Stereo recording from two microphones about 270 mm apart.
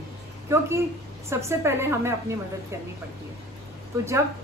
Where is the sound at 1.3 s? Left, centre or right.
Centre.